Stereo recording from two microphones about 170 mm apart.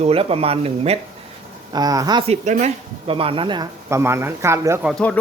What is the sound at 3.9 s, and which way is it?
Speech, 15° right (ahead or behind).